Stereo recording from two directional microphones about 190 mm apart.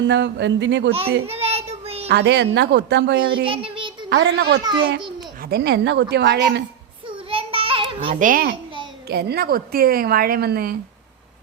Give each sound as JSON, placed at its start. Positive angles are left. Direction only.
{"t": 0.0, "sound": "speech", "side_deg": -70}
{"t": 1.3, "sound": "child singing", "side_deg": -30}
{"t": 2.0, "sound": "a woman's voice", "side_deg": -60}
{"t": 3.4, "sound": "child singing", "side_deg": -25}
{"t": 4.1, "sound": "a woman's voice", "side_deg": -60}
{"t": 4.6, "sound": "a child's voice", "side_deg": -25}
{"t": 5.4, "sound": "a woman's voice", "side_deg": -55}
{"t": 7.3, "sound": "a sound", "side_deg": -30}
{"t": 8.0, "sound": "a woman's voice", "side_deg": -40}
{"t": 9.0, "sound": "a woman's voice", "side_deg": -55}